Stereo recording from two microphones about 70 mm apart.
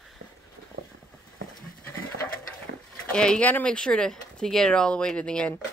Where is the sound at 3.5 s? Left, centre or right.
Left.